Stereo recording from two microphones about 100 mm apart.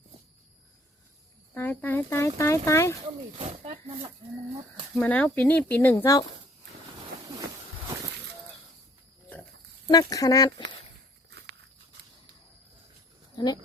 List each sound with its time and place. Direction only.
1.5 s speech: 20° left (ahead or behind)
3.3 s speech: 70° right (ahead or behind)
5.0 s speech: 15° left (ahead or behind)
7.2 s a sound: 40° right (ahead or behind)
9.8 s speech: 35° left (ahead or behind)
13.3 s speech: 45° left (ahead or behind)